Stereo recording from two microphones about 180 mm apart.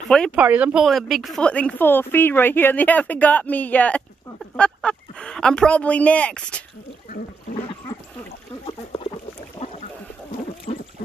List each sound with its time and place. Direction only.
0.4 s a woman's voice: 10° right (ahead or behind)
10.7 s boat: 35° left (ahead or behind)